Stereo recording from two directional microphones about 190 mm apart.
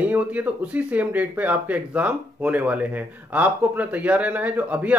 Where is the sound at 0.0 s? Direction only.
10° right (ahead or behind).